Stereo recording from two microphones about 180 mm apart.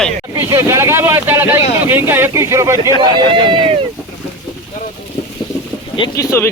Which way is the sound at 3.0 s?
25° right (ahead or behind).